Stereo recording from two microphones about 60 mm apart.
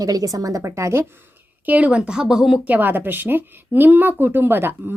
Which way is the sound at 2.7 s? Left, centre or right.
Right.